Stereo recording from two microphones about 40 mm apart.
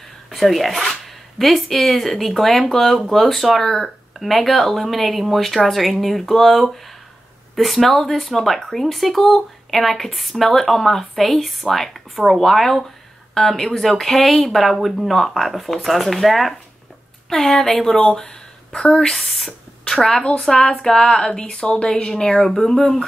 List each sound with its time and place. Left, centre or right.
0.3 s a woman's voice: centre
17.3 s a woman's voice: centre
18.2 s a sound: left
19.1 s a woman's voice: centre; by 22.1 s left
22.1 s a woman's voice: centre